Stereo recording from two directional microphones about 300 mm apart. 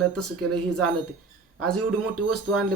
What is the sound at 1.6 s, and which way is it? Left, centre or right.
Speech, right.